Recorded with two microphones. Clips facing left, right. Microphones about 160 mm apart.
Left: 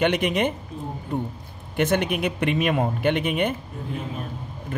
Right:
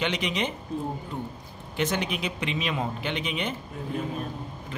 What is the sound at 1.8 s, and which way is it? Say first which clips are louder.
Speech: left 6 dB; 55° left (ahead or behind).